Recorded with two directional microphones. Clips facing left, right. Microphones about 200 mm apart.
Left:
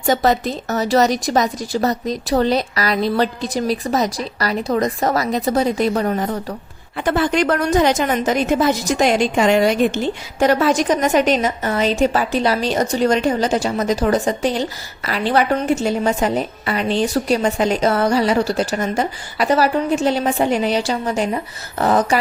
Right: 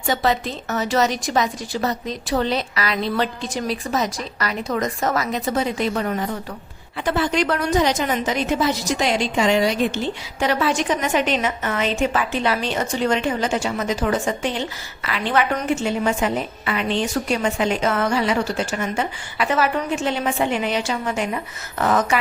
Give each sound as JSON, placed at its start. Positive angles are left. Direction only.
{"t": 0.0, "sound": "a woman's voice", "side_deg": 40}
{"t": 6.9, "sound": "a woman's voice", "side_deg": 50}